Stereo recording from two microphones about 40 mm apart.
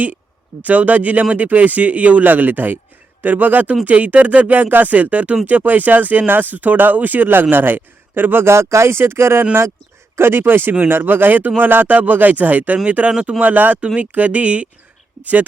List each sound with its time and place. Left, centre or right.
0.6 s speech: right
2.3 s speech: right
7.5 s speech: right
10.4 s speech: right
11.3 s speech: right
13.1 s speech: right
13.4 s speech: right